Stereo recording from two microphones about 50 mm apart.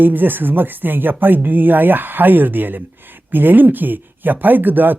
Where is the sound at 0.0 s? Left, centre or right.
Right.